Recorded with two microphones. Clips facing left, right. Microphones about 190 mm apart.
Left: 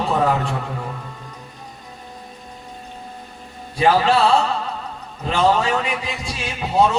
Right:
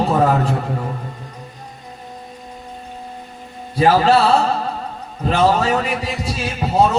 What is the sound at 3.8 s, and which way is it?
A man's voice, 40° right (ahead or behind).